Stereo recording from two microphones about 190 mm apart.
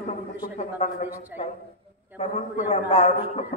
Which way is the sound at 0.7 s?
35° left (ahead or behind).